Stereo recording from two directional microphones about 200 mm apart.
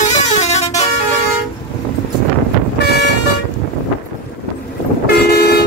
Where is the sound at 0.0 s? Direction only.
35° left (ahead or behind).